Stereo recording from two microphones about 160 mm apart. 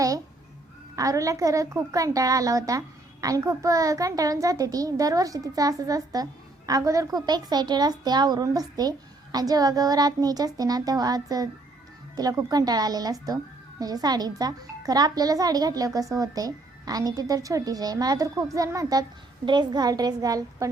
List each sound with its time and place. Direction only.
0.9 s speech: 20° right (ahead or behind)